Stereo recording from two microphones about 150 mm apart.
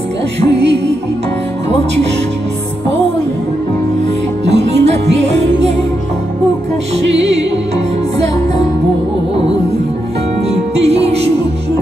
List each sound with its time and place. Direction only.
4.5 s music: 45° right (ahead or behind)
10.5 s music: 45° right (ahead or behind)